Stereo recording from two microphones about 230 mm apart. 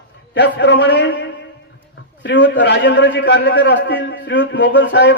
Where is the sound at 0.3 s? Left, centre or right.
Left.